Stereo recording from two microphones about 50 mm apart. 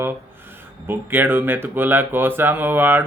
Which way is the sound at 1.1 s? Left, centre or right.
Right.